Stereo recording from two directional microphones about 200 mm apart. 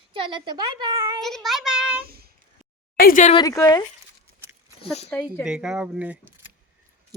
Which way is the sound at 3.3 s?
15° left (ahead or behind).